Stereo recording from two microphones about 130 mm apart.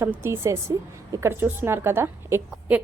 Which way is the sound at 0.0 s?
20° right (ahead or behind).